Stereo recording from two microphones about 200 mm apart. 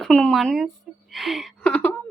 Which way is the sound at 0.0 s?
5° left (ahead or behind).